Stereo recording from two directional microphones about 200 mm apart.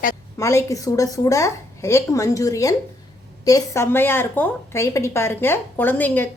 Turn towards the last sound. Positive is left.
turn(degrees=10)  # may be behind; listen again after turning